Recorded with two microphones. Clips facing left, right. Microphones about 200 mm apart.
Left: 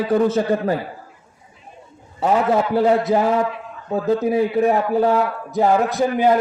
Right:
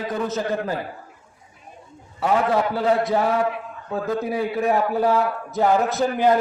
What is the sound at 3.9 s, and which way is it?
A man's voice, 25° left (ahead or behind).